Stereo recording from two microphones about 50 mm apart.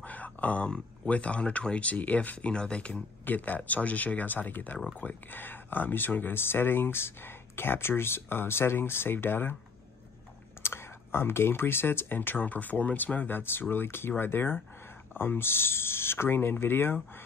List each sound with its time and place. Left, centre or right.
0.0 s a sound: left
1.0 s speech: left
3.3 s speech: left
10.6 s speech: left
13.4 s speech: left